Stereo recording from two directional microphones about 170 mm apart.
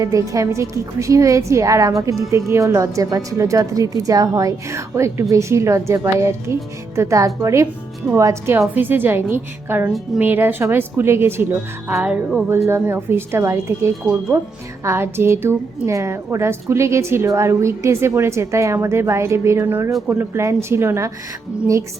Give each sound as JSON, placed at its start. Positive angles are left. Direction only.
{"t": 0.0, "sound": "a woman's voice", "side_deg": -20}